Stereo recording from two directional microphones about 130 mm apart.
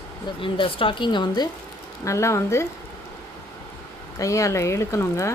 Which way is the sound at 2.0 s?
20° left (ahead or behind).